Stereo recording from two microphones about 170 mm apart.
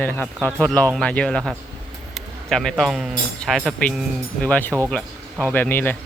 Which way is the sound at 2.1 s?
Centre (ahead or behind).